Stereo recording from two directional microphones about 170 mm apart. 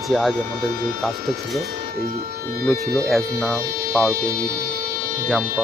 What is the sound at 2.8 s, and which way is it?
Speech, 65° right (ahead or behind).